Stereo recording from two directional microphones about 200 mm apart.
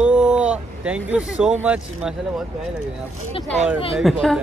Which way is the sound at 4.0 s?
Centre (ahead or behind).